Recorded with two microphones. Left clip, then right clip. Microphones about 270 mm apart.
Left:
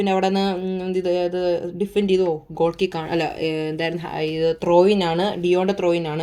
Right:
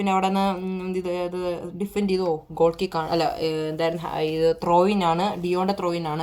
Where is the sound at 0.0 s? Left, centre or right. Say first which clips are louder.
Left 2 dB; right.